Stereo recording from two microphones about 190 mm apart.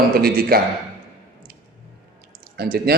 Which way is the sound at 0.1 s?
50° right (ahead or behind).